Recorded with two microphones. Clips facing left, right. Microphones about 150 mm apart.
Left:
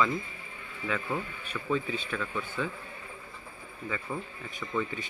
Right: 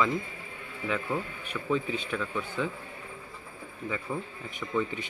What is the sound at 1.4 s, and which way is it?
Speech, 15° right (ahead or behind).